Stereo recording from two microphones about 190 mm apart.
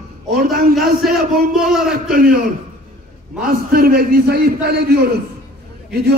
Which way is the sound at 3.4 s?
50° right (ahead or behind).